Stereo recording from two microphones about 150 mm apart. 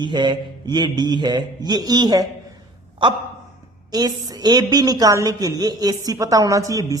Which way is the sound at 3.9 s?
25° right (ahead or behind).